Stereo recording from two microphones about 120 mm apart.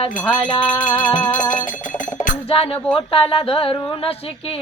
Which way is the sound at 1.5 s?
90° left.